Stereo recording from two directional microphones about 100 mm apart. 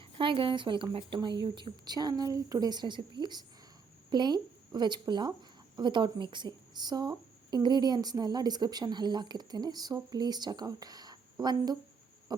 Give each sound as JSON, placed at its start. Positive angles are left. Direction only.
{"t": 0.0, "sound": "a woman's voice", "side_deg": -60}